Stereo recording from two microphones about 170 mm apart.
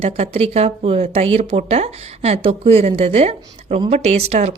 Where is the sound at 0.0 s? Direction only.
40° right (ahead or behind).